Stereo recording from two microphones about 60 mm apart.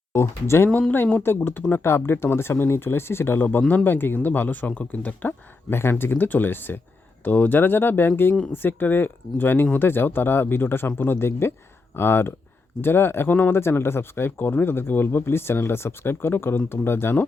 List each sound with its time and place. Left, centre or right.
0.1 s speech: left
0.7 s speech: left
1.2 s speech: left
5.7 s speech: left